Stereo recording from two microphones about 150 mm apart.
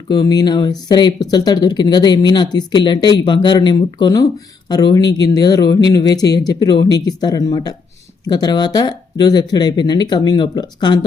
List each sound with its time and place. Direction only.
0.1 s speech: 25° left (ahead or behind)